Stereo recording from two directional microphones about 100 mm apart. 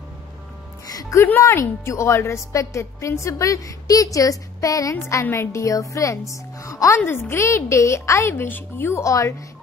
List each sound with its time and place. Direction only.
1.2 s a woman's voice: 20° left (ahead or behind)
5.2 s a woman's voice: 25° left (ahead or behind)